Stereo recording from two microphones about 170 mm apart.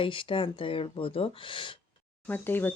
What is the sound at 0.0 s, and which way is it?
Speech, 30° left (ahead or behind).